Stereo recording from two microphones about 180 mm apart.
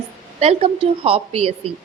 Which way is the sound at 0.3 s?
35° right (ahead or behind).